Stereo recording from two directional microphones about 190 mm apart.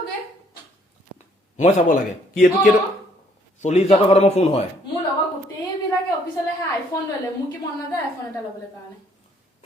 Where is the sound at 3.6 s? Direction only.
35° left (ahead or behind).